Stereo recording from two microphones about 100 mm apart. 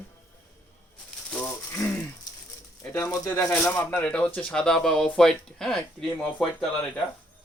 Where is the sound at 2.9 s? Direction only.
25° left (ahead or behind).